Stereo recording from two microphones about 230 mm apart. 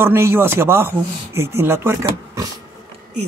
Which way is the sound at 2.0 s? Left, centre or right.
Centre.